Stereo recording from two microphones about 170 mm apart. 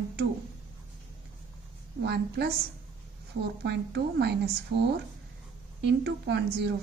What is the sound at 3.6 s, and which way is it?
Speech, 75° right (ahead or behind).